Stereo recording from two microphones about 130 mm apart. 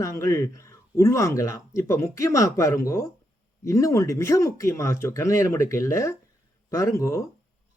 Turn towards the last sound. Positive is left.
turn(degrees=25)  # may be behind; listen again after turning